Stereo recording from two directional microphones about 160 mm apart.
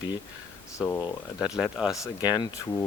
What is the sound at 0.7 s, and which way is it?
Speech, 15° left (ahead or behind).